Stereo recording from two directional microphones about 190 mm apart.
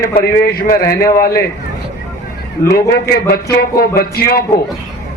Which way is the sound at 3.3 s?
55° left (ahead or behind).